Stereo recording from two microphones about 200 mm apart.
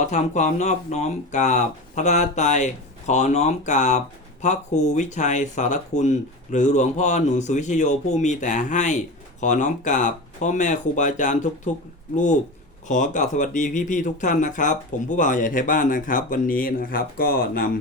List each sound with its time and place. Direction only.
0.0 s speech: 35° left (ahead or behind)
12.9 s speech: 40° left (ahead or behind)